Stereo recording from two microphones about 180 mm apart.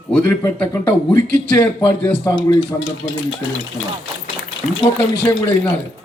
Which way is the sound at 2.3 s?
20° left (ahead or behind).